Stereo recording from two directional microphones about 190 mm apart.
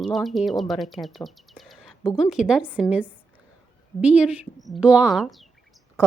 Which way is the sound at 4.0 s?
5° right (ahead or behind).